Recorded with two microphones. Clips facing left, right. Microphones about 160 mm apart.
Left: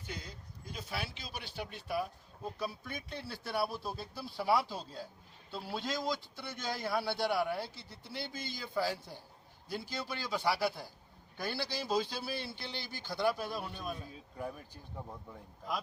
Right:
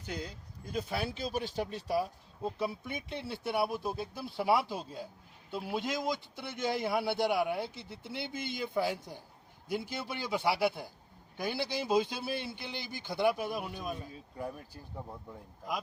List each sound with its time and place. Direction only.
0.7 s a man's voice: 50° right (ahead or behind); by 15.8 s 10° right (ahead or behind)